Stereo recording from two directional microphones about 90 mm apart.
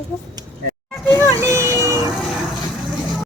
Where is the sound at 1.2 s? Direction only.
35° right (ahead or behind).